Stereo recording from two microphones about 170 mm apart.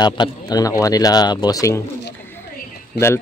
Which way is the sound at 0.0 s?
25° left (ahead or behind).